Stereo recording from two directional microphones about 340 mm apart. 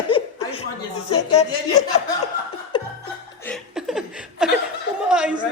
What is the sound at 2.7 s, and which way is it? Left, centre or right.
Chuckle, centre.